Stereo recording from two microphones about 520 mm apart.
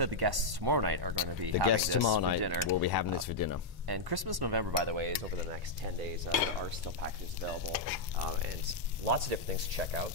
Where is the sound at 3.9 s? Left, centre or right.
Right.